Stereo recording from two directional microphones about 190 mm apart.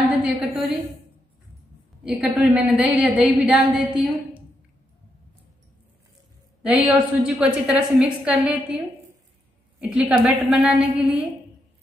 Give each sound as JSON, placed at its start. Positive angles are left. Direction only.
{"t": 0.2, "sound": "a woman's voice", "side_deg": 0}
{"t": 2.0, "sound": "a woman's voice", "side_deg": -5}
{"t": 6.6, "sound": "a woman's voice", "side_deg": -5}
{"t": 9.8, "sound": "a woman's voice", "side_deg": -5}